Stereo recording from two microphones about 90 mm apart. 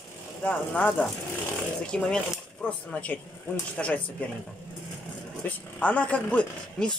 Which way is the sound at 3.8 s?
10° left (ahead or behind).